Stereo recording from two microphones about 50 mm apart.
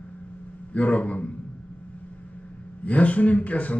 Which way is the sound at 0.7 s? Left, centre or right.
Left.